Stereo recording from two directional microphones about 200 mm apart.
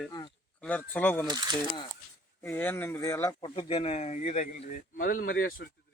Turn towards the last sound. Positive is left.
turn(degrees=45)  # may be behind; listen again after turning